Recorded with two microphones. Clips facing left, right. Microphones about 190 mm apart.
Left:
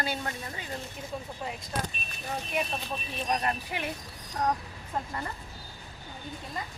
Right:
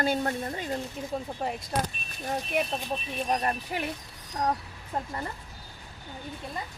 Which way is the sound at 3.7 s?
40° right (ahead or behind).